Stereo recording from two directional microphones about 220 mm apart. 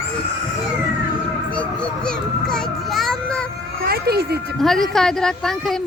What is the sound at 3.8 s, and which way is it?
Music, 45° right (ahead or behind).